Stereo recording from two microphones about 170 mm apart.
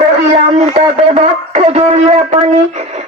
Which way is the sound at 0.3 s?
35° right (ahead or behind).